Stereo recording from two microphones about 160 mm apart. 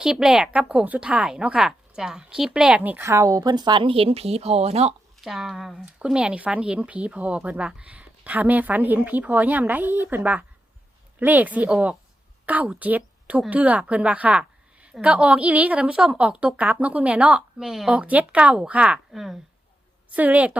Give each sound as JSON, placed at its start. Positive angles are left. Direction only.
{"t": 0.0, "sound": "a woman's voice", "side_deg": -5}
{"t": 5.2, "sound": "a woman's voice", "side_deg": 0}